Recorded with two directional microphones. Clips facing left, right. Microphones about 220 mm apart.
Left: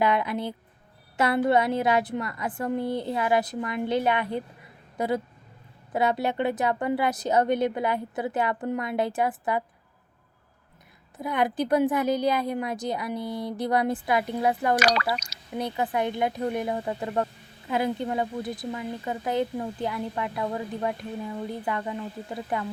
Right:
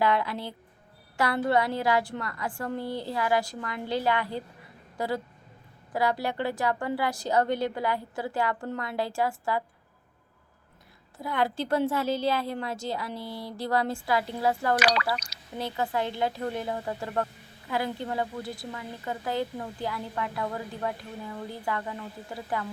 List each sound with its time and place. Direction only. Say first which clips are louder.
0.0 s a woman's voice: left 2 dB; 20° left (ahead or behind)
11.2 s a woman's voice: left 3 dB; 20° left (ahead or behind)
14.8 s speech: left 2 dB; 45° left (ahead or behind)
15.5 s a woman's voice: left 2 dB; 20° left (ahead or behind)